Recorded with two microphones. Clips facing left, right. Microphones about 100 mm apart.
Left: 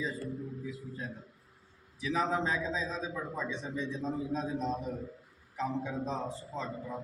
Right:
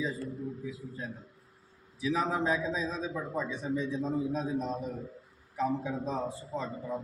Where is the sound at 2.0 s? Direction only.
10° right (ahead or behind).